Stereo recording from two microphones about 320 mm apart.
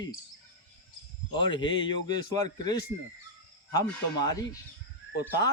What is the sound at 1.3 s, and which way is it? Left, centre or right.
Speech, centre.